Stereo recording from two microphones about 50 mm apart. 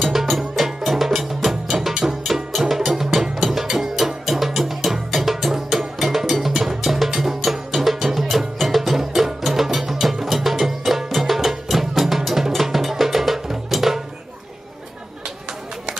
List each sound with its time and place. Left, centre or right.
0.0 s music: centre